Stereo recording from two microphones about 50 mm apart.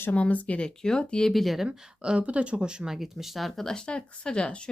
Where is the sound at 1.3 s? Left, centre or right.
Centre.